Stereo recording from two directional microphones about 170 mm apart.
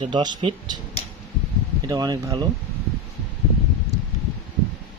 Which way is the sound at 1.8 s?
25° right (ahead or behind).